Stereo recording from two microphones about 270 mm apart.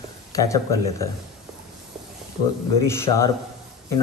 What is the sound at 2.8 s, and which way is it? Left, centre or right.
Speech, centre.